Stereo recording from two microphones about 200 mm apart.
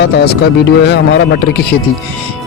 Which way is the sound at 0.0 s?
55° left (ahead or behind).